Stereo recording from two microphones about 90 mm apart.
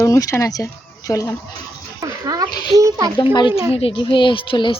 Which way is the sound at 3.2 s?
60° left (ahead or behind).